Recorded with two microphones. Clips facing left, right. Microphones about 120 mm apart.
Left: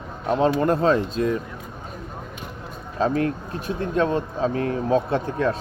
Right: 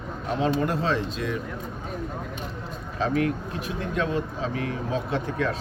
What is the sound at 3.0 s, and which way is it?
Speech, 40° left (ahead or behind).